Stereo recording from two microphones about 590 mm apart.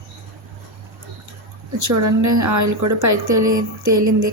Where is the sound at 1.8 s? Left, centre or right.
Right.